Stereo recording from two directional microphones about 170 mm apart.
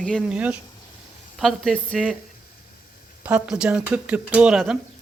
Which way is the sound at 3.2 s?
10° right (ahead or behind).